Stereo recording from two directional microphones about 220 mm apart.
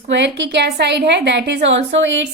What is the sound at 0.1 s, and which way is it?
A woman's voice, 50° right (ahead or behind).